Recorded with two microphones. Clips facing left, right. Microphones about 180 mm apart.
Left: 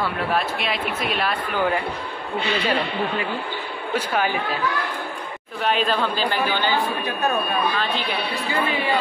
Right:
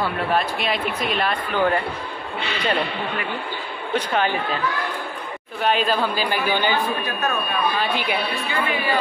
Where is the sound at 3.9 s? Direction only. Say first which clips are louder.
Right 1 dB; 10° left (ahead or behind).